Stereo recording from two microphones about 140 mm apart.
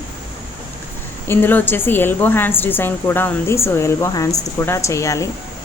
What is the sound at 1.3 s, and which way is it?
A woman's voice, 15° left (ahead or behind).